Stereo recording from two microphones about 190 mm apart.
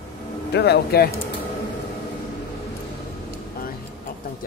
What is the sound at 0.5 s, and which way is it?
Speech, 60° left (ahead or behind).